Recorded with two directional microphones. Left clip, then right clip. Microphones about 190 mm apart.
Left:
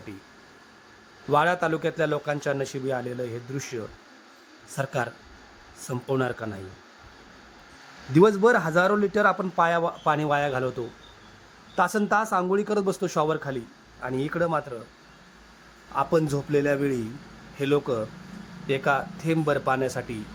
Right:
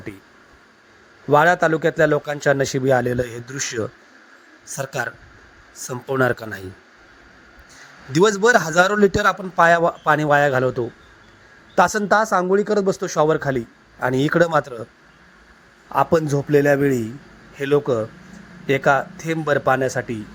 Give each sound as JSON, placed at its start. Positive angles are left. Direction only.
{"t": 1.3, "sound": "a man's voice", "side_deg": -20}
{"t": 8.1, "sound": "a man's voice", "side_deg": -30}
{"t": 15.9, "sound": "a man's voice", "side_deg": -25}